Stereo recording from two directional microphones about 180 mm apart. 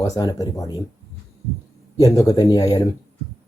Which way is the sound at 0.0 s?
20° left (ahead or behind).